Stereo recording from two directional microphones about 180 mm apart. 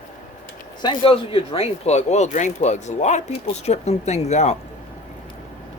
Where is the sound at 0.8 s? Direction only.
30° left (ahead or behind).